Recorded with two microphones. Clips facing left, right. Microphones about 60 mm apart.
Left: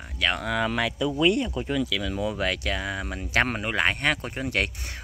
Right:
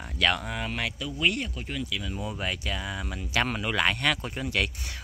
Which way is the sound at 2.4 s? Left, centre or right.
Left.